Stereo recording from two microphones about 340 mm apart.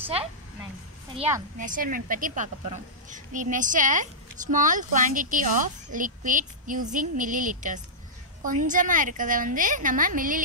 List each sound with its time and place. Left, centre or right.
1.6 s a woman's voice: right